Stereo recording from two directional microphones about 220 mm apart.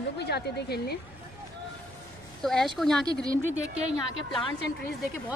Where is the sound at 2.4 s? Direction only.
Centre (ahead or behind).